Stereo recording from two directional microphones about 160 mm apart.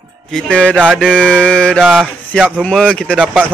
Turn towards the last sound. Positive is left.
turn(degrees=-10)  # may be behind; listen again after turning